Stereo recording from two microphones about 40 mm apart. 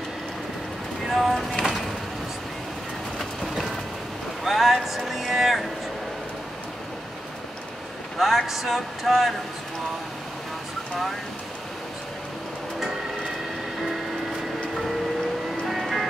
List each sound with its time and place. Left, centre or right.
1.0 s speech: centre
4.5 s speech: centre
8.2 s speech: centre
15.6 s music: centre